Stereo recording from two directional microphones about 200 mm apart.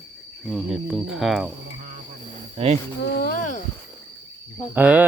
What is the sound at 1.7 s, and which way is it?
Speech, 40° right (ahead or behind).